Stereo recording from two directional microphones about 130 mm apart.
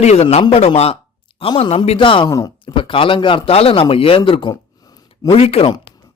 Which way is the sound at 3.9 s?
45° left (ahead or behind).